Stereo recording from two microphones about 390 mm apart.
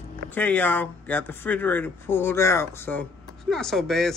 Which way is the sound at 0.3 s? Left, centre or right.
Centre.